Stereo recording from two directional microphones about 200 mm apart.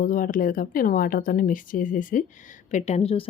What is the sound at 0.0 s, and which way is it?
Speech, 40° left (ahead or behind).